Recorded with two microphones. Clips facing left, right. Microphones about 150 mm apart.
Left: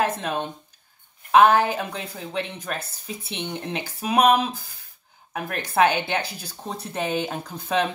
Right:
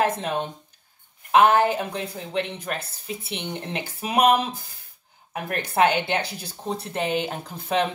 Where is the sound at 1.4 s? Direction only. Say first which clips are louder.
Even; 20° right (ahead or behind).